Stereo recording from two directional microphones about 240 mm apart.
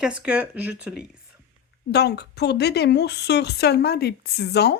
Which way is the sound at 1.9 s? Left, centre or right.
Left.